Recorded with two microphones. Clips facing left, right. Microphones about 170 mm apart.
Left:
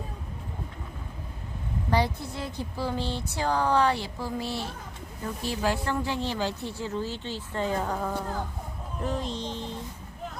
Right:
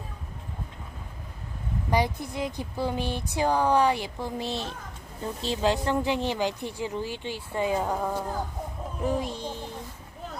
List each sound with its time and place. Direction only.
1.9 s speech: 15° right (ahead or behind)